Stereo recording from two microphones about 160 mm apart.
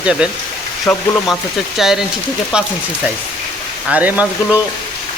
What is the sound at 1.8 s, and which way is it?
Speech, 5° right (ahead or behind).